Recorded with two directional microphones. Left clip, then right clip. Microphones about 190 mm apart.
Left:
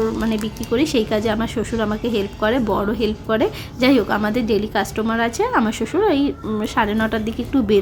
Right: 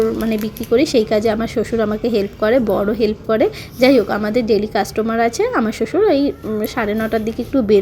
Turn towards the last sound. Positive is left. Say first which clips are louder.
# right 3 dB
turn(degrees=-10)  # may be behind; listen again after turning